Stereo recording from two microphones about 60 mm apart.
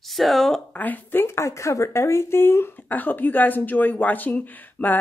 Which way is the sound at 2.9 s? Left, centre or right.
Left.